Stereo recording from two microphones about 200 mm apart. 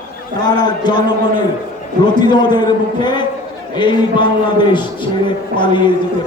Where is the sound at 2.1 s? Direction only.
20° left (ahead or behind).